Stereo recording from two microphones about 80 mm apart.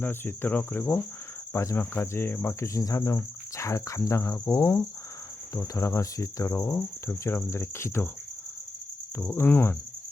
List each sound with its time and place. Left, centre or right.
0.0 s cricket: left
1.5 s speech: left
9.1 s speech: left